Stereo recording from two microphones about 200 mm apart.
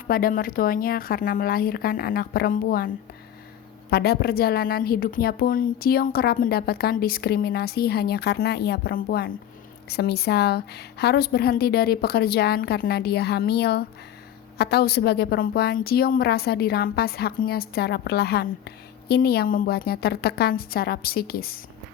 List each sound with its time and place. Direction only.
0.1 s a woman's voice: 45° left (ahead or behind)